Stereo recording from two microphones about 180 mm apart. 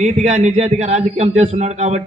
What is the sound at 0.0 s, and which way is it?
A man's voice, 40° right (ahead or behind).